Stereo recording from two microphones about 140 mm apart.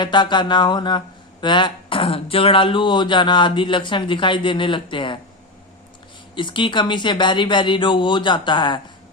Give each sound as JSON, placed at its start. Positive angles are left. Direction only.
{"t": 0.0, "sound": "a man's voice", "side_deg": 35}
{"t": 6.3, "sound": "a man's voice", "side_deg": 35}